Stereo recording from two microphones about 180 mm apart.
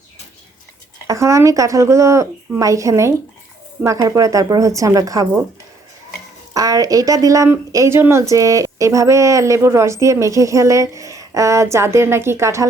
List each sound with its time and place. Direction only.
1.0 s speech: 15° right (ahead or behind)
6.5 s speech: 20° right (ahead or behind)